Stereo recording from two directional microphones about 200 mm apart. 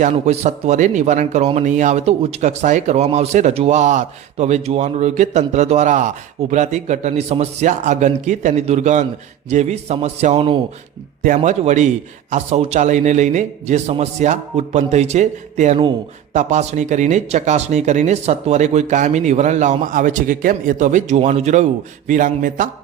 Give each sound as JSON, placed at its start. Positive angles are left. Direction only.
{"t": 0.0, "sound": "speech", "side_deg": -35}